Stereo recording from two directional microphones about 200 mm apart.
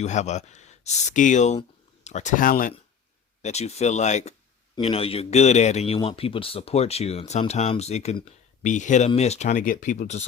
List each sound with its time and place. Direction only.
0.0 s speech: 35° left (ahead or behind)
3.4 s speech: 35° left (ahead or behind)